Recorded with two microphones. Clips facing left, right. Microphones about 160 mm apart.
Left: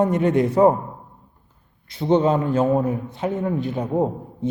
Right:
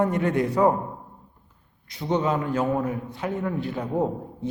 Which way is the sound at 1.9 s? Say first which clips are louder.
Left 6 dB; 25° left (ahead or behind).